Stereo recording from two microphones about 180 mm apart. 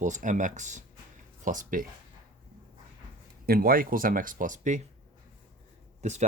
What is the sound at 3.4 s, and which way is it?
Speech, 55° right (ahead or behind).